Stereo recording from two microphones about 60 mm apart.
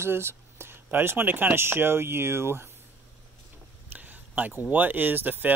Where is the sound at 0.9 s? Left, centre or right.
Right.